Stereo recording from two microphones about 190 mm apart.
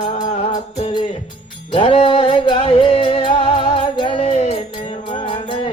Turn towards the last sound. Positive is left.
turn(degrees=25)  # may be behind; listen again after turning